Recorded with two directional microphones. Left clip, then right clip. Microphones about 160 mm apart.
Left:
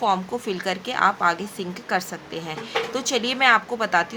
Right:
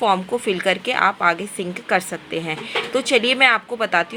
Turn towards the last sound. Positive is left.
turn(degrees=-35)  # may be behind; listen again after turning